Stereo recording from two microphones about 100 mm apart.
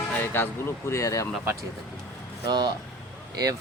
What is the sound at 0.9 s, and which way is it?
Speech, 30° left (ahead or behind).